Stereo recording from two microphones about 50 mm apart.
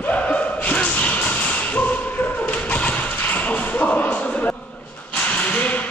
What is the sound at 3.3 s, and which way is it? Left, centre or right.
Shuffle, left.